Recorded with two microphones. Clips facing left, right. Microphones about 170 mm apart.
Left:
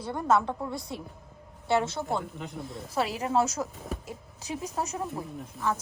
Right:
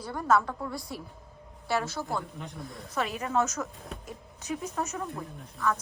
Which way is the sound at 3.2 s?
30° left (ahead or behind).